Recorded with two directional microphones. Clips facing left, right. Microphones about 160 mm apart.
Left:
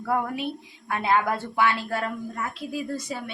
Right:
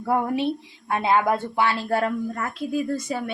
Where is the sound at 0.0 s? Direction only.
25° right (ahead or behind).